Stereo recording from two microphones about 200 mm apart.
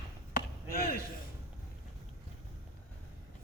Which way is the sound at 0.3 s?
50° left (ahead or behind).